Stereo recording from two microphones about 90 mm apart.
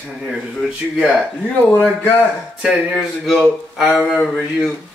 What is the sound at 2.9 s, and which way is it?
A man's voice, centre (ahead or behind).